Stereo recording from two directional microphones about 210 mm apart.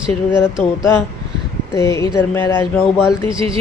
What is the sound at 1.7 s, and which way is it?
Speech, 15° left (ahead or behind).